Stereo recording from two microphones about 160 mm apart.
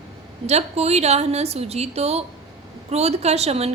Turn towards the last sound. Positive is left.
turn(degrees=-40)  # may be behind; listen again after turning